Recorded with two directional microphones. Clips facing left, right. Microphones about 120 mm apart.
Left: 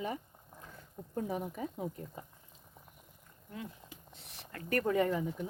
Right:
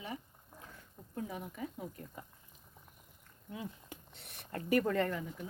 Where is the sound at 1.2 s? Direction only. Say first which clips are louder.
Left 5 dB; 35° left (ahead or behind).